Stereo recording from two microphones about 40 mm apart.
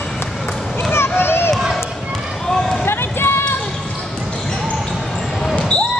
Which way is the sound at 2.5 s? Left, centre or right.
Centre.